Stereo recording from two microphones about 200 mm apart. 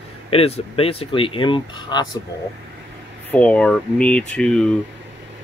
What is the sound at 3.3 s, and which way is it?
Speech, 5° left (ahead or behind).